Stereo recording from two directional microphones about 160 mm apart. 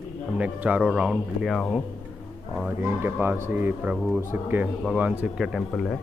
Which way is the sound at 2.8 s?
15° right (ahead or behind).